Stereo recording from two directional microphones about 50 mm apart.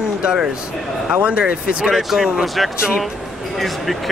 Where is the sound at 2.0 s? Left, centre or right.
Centre.